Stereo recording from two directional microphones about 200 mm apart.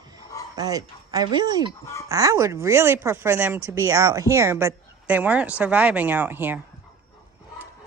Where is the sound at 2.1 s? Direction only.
15° right (ahead or behind).